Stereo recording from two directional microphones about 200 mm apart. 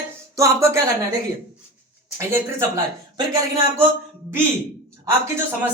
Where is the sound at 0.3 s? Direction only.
15° right (ahead or behind).